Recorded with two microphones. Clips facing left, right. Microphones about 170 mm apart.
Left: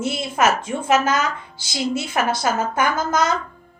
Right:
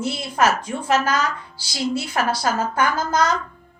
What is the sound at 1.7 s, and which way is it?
A woman's voice, 25° left (ahead or behind).